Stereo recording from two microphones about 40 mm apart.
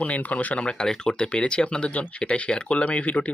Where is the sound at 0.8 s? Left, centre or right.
Centre; by 3.3 s left.